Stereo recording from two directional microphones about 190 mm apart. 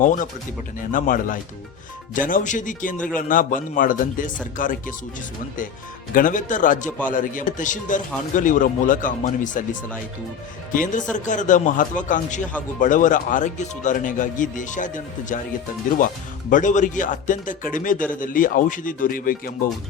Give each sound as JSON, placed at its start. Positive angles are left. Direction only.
{"t": 0.0, "sound": "speech", "side_deg": 45}
{"t": 6.1, "sound": "speech", "side_deg": 45}
{"t": 10.7, "sound": "speech", "side_deg": 45}
{"t": 16.5, "sound": "speech", "side_deg": 40}